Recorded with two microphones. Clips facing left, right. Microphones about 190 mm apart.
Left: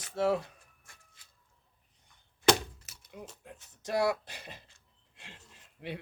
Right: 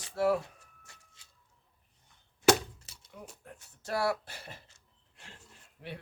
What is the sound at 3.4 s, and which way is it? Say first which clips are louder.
Speech: left 3 dB; 20° left (ahead or behind).